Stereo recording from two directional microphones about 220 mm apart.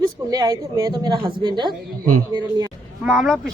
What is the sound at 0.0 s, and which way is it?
A woman's voice, 15° right (ahead or behind).